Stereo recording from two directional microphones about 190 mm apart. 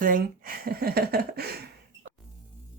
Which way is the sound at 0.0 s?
45° right (ahead or behind).